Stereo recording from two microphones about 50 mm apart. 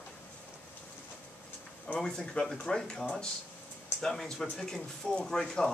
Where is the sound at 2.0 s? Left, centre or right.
Centre.